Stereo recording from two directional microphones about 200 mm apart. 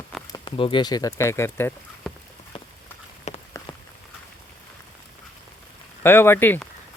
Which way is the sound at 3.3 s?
35° left (ahead or behind).